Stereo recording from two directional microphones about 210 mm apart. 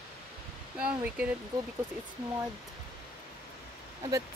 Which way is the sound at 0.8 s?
5° right (ahead or behind).